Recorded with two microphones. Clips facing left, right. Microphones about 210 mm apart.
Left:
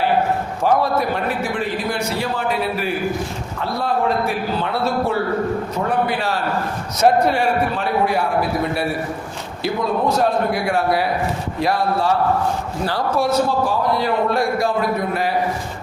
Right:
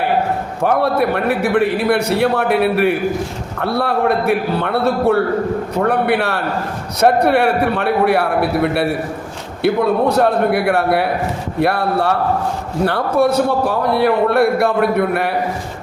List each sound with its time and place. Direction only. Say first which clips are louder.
0.6 s a man's voice: right 3 dB; 60° right (ahead or behind)